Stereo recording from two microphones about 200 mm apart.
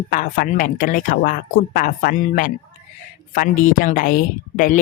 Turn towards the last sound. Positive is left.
turn(degrees=40)  # may be behind; listen again after turning